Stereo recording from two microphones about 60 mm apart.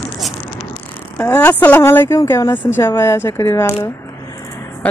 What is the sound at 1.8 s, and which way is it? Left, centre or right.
Speech, left.